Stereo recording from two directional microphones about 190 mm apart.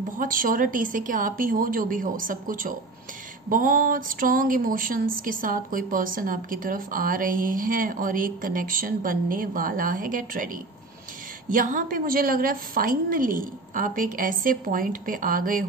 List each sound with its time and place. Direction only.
0.2 s speech: 45° right (ahead or behind)